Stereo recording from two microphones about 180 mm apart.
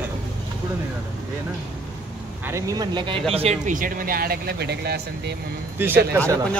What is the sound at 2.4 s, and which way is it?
Speech, 15° right (ahead or behind).